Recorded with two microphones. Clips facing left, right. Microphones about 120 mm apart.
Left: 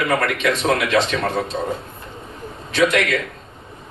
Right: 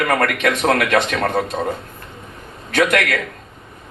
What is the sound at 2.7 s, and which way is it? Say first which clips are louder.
Speech: even; 55° right (ahead or behind).